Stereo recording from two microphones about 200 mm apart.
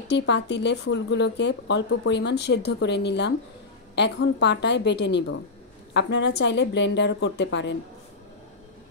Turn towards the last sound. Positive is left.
turn(degrees=60)  # may be behind; listen again after turning